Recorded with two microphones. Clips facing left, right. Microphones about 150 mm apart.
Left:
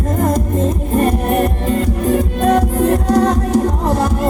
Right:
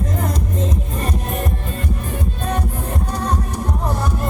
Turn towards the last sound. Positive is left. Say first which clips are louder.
# left 8 dB
turn(degrees=90)